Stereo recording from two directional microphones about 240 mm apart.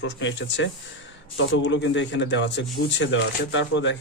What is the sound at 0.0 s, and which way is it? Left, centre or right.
Speech, left.